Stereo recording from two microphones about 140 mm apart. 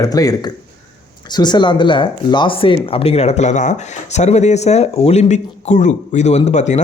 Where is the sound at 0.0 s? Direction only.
25° left (ahead or behind).